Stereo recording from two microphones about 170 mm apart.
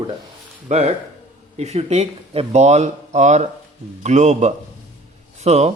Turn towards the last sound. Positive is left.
turn(degrees=-40)  # may be behind; listen again after turning